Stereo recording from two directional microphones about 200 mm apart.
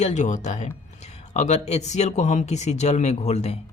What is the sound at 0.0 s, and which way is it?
Speech, 35° left (ahead or behind).